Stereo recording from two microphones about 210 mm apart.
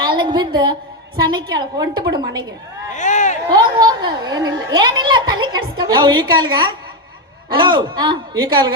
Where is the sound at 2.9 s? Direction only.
35° left (ahead or behind).